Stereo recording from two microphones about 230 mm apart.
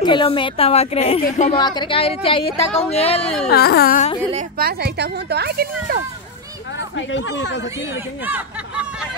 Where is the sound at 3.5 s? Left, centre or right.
Left.